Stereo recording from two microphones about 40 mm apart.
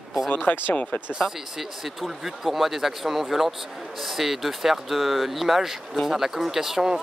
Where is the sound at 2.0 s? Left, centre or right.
Centre.